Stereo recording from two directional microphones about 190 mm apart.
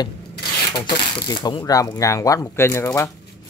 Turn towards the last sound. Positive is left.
turn(degrees=15)  # may be behind; listen again after turning